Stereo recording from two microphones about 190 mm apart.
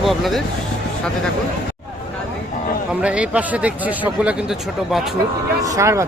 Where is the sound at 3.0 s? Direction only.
5° right (ahead or behind).